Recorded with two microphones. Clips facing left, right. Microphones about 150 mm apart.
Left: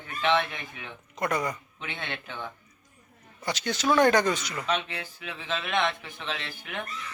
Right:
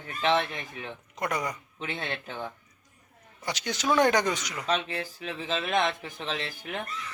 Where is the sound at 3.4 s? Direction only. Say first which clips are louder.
Left 2 dB; 15° right (ahead or behind).